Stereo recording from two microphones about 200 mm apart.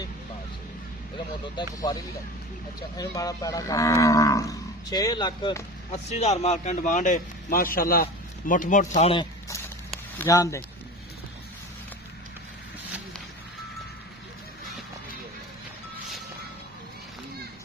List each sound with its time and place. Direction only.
1.6 s speech: 25° left (ahead or behind)
3.0 s livestock: 20° left (ahead or behind)
6.1 s a man's voice: 35° left (ahead or behind)
10.2 s livestock: 15° left (ahead or behind)